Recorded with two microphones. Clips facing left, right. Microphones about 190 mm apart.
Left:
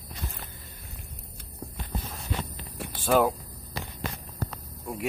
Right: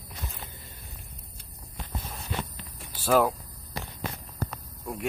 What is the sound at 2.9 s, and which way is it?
Speech, 5° right (ahead or behind).